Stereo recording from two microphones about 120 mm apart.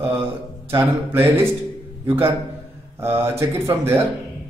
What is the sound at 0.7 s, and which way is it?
A man's voice, 20° right (ahead or behind).